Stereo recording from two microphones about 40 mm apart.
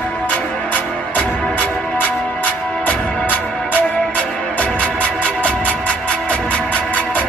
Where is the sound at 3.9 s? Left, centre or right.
Left.